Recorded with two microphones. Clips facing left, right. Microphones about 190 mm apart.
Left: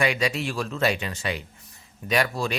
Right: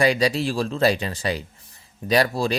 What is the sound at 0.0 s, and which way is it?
Speech, 35° right (ahead or behind).